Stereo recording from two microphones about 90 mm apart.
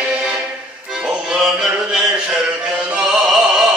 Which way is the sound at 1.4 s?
5° right (ahead or behind).